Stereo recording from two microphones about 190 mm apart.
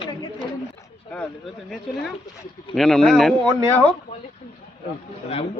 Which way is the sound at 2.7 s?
Centre (ahead or behind).